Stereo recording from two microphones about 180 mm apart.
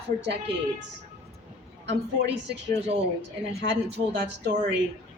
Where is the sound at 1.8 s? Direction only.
70° right (ahead or behind).